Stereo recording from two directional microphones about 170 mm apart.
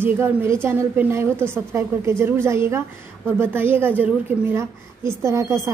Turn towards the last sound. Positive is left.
turn(degrees=-15)  # may be behind; listen again after turning